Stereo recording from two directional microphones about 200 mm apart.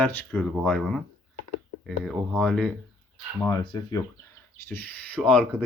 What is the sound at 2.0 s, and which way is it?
Speech, centre (ahead or behind).